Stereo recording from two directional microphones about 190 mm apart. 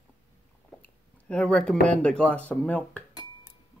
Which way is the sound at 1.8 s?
5° left (ahead or behind).